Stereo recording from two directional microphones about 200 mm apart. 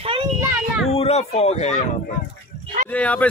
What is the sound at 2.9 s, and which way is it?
Speech, 5° left (ahead or behind).